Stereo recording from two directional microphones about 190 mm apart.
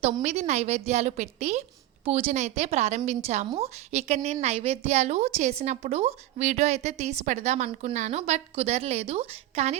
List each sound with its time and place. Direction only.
0.0 s a woman's voice: 35° right (ahead or behind)